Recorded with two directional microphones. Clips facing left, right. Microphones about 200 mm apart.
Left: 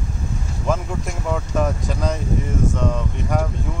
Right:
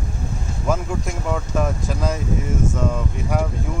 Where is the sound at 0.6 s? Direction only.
Centre (ahead or behind).